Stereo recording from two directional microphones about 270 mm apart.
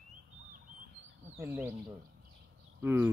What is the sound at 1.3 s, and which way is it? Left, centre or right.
Speech, centre.